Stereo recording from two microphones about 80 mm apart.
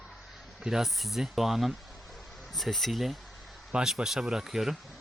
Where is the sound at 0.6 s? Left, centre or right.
Centre.